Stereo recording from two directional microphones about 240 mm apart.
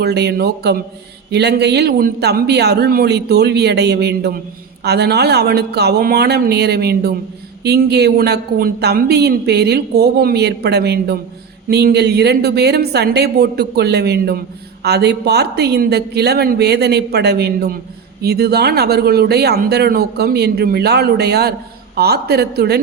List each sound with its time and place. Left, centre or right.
0.0 s speech: right